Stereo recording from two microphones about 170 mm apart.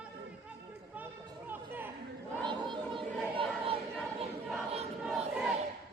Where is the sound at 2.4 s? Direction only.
30° right (ahead or behind).